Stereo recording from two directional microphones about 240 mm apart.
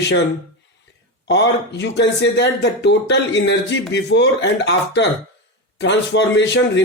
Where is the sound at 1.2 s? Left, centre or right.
Left.